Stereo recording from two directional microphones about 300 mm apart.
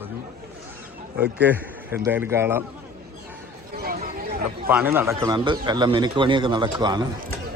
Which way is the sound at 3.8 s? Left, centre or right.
Right.